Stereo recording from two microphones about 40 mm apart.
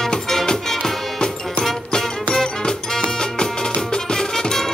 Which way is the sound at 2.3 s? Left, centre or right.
Centre.